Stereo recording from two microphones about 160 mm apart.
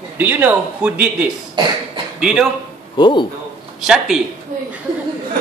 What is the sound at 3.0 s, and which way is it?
Speech, 30° left (ahead or behind).